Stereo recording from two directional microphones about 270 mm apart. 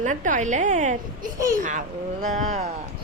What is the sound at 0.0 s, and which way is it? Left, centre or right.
Speech, right.